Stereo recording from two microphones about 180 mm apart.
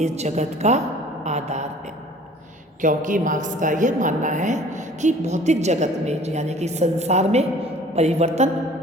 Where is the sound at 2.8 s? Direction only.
45° right (ahead or behind).